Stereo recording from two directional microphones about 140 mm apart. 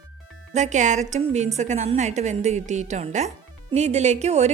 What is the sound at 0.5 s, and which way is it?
A woman's voice, 55° right (ahead or behind).